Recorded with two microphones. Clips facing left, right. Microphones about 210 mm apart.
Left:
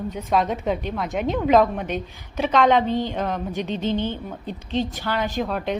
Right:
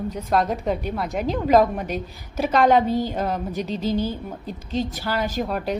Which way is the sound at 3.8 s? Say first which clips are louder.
Right 1 dB; 40° right (ahead or behind).